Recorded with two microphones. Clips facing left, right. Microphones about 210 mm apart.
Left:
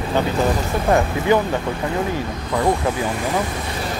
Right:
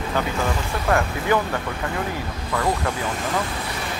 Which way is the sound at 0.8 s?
20° left (ahead or behind).